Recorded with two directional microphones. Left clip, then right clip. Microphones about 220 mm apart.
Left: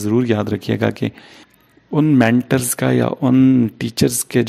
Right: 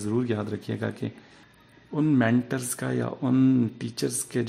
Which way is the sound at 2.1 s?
35° left (ahead or behind).